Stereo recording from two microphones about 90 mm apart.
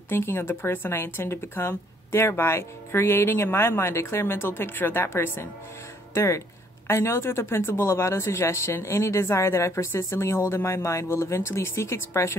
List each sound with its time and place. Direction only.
0.1 s speech: 25° left (ahead or behind)